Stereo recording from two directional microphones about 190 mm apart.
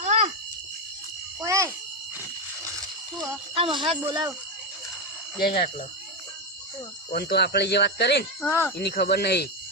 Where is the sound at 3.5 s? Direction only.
30° right (ahead or behind).